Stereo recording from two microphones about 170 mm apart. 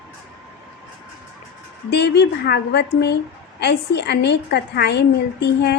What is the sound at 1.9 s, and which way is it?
A woman's voice, 80° left.